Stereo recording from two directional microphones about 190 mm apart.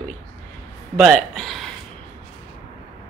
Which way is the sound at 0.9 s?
Centre (ahead or behind).